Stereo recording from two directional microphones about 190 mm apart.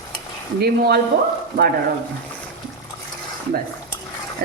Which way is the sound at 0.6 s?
55° right (ahead or behind).